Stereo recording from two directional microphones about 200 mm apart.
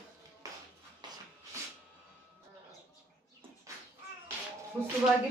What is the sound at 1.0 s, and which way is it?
Rub, 20° right (ahead or behind).